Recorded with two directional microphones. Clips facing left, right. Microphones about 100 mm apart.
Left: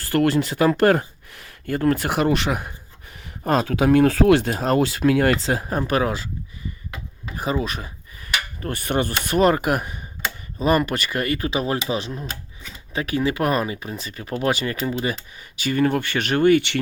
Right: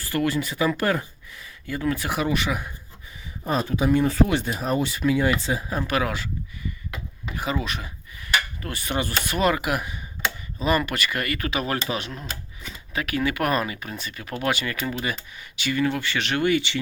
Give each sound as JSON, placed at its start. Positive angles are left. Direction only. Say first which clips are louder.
{"t": 0.0, "sound": "speech", "louder": "left 5 dB", "side_deg": 60}
{"t": 3.4, "sound": "speech", "louder": "left 4 dB", "side_deg": 90}
{"t": 5.9, "sound": "speech", "louder": "left 3 dB", "side_deg": 30}
{"t": 7.6, "sound": "a sound", "louder": "left 3 dB", "side_deg": 40}
{"t": 10.8, "sound": "speech", "louder": "left 3 dB", "side_deg": 40}
{"t": 12.1, "sound": "speech", "louder": "left 3 dB", "side_deg": 5}
{"t": 12.9, "sound": "speech", "louder": "left 3 dB", "side_deg": 30}